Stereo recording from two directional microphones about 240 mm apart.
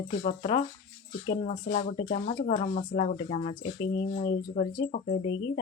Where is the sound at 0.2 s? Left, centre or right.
Left.